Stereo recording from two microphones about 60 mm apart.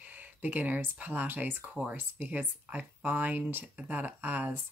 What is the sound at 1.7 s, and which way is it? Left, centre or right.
Speech, right.